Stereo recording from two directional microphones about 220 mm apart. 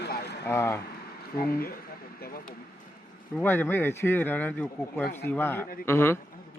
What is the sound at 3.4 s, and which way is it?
Speech, 10° left (ahead or behind).